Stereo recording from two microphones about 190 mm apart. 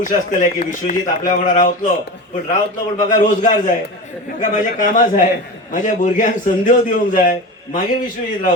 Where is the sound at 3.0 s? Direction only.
40° left (ahead or behind).